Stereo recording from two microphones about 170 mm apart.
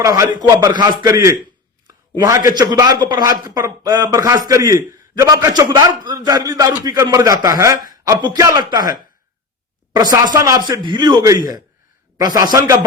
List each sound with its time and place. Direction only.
0.0 s speech: 20° right (ahead or behind)